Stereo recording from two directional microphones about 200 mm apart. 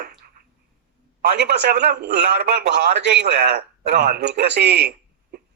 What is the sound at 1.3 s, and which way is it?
A man's voice, 60° right (ahead or behind).